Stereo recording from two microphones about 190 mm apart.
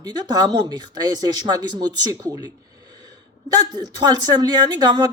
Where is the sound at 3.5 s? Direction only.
20° right (ahead or behind).